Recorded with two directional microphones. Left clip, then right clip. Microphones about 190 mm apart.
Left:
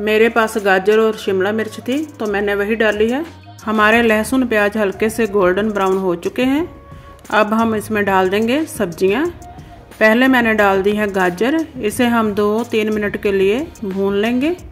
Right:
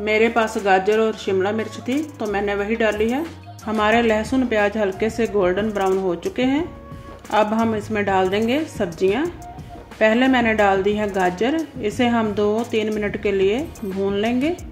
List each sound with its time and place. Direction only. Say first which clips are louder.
0.0 s speech: left 4 dB; 25° left (ahead or behind)